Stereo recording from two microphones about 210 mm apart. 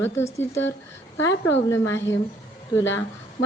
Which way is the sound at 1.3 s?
60° left (ahead or behind).